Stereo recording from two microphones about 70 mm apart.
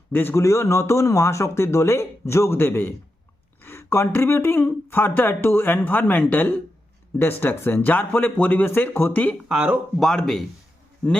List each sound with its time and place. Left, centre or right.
0.1 s speech: left
10.0 s speech: centre